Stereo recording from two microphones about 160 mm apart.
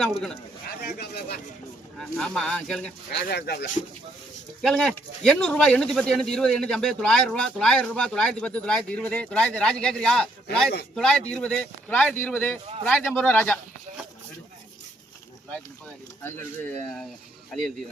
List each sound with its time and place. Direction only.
0.0 s speech: 5° left (ahead or behind)
0.8 s a sound: 85° left
2.0 s speech: 5° left (ahead or behind)
3.1 s speech: 80° left
4.6 s speech: 5° left (ahead or behind)